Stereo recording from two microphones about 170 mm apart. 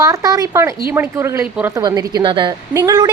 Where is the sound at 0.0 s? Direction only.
20° right (ahead or behind).